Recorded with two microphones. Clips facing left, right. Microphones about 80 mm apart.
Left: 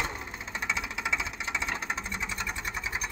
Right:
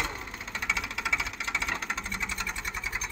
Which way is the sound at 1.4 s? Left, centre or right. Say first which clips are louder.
Even; centre.